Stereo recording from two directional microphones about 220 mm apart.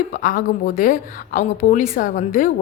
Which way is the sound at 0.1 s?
40° left (ahead or behind).